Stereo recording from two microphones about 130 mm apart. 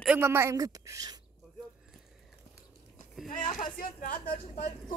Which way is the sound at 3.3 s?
90° left.